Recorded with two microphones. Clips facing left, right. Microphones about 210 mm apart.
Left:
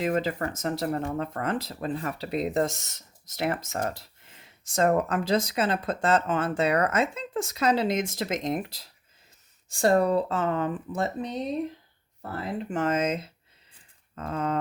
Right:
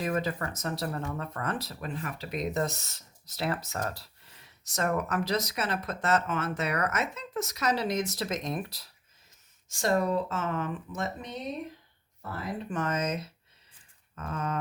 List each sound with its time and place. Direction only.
0.0 s speech: 25° left (ahead or behind)
12.7 s speech: 25° left (ahead or behind)